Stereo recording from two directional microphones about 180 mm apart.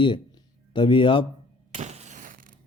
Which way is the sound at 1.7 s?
35° right (ahead or behind).